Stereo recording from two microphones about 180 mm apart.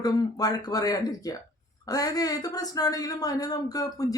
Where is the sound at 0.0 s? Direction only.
20° left (ahead or behind).